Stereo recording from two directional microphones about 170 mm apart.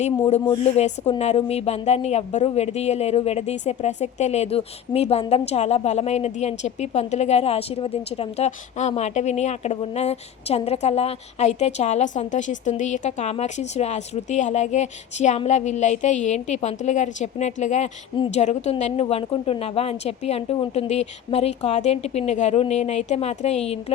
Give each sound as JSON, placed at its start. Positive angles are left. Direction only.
{"t": 0.3, "sound": "speech", "side_deg": 35}